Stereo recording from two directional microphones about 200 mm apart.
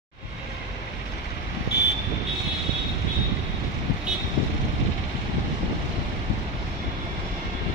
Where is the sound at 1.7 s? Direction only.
55° left (ahead or behind).